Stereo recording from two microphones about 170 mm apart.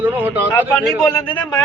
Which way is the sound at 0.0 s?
10° right (ahead or behind).